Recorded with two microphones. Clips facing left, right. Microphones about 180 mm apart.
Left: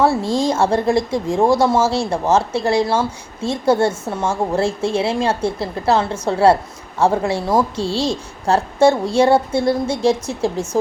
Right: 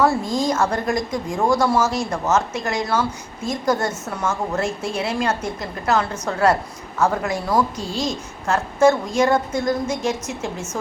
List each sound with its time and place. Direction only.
0.0 s a woman's voice: 30° left (ahead or behind)